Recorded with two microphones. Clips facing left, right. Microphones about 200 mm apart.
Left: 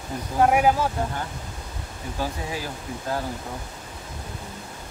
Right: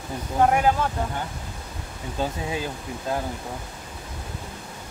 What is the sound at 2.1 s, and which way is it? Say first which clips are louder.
Speech: right 2 dB; 20° right (ahead or behind).